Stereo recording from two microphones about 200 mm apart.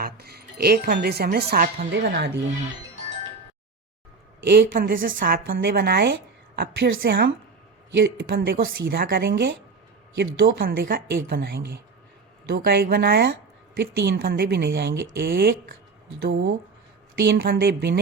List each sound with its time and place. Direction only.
0.0 s speech: 50° right (ahead or behind)
4.5 s speech: 45° right (ahead or behind)
10.3 s speech: 50° right (ahead or behind)
16.2 s speech: 60° right (ahead or behind)
17.2 s speech: 50° right (ahead or behind)